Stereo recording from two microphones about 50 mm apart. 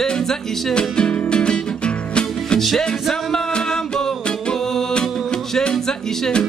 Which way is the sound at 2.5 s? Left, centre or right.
Centre.